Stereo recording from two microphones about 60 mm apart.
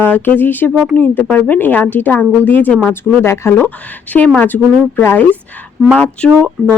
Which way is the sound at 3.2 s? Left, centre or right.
Left.